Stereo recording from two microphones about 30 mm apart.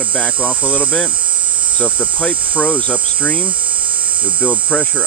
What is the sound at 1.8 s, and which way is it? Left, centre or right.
Speech, left.